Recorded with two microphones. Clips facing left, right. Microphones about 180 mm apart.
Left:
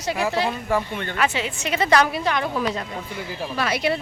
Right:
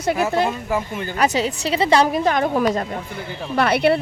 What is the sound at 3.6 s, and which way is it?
Speech, 60° right (ahead or behind).